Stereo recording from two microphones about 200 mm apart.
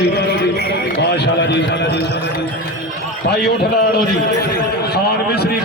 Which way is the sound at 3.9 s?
50° left (ahead or behind).